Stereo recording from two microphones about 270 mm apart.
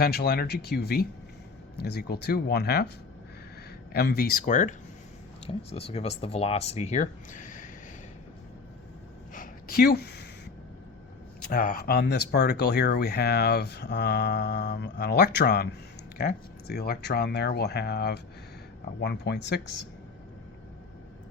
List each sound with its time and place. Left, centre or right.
0.0 s speech: left
3.9 s speech: left
5.7 s speech: left
9.3 s a sound: left
11.4 s speech: left